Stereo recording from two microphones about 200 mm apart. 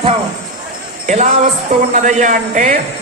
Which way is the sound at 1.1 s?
35° right (ahead or behind).